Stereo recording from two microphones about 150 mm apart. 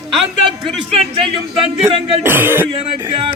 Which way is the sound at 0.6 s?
40° right (ahead or behind).